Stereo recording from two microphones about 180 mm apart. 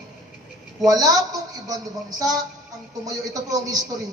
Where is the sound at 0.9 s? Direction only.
20° right (ahead or behind).